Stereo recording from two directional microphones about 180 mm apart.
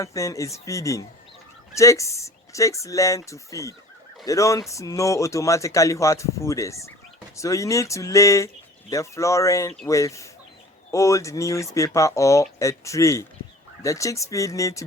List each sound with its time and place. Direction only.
0.0 s speech: 15° left (ahead or behind)